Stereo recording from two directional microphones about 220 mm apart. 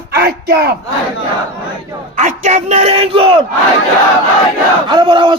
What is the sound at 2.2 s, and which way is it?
Speech, 35° right (ahead or behind).